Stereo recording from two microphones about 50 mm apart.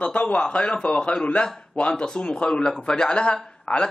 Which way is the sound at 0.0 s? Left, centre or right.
Left.